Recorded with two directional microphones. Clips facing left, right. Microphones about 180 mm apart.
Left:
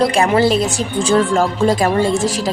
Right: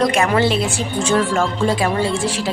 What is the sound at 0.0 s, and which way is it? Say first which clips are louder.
Speech: left 3 dB; 30° left (ahead or behind).